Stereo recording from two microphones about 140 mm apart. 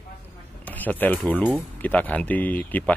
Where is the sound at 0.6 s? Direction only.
10° left (ahead or behind).